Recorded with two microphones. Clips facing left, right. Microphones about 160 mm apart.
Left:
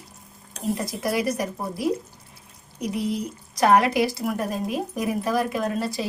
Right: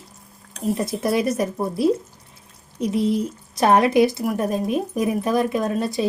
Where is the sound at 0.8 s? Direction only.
25° right (ahead or behind).